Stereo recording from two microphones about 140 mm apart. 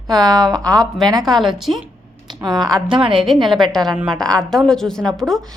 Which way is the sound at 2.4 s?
30° right (ahead or behind).